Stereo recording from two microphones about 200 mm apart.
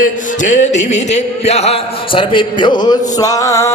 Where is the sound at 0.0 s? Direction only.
35° left (ahead or behind).